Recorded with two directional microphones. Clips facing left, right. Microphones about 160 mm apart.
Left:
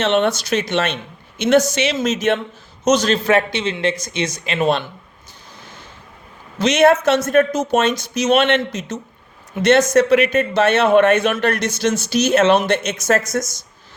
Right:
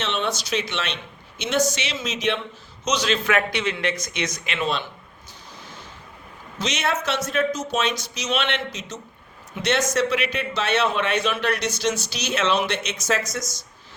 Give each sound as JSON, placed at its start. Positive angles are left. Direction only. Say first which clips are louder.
{"t": 0.0, "sound": "a man's voice", "louder": "left 9 dB", "side_deg": 55}
{"t": 4.6, "sound": "a man's voice", "louder": "left 8 dB", "side_deg": 55}
{"t": 6.6, "sound": "a man's voice", "louder": "left 12 dB", "side_deg": 55}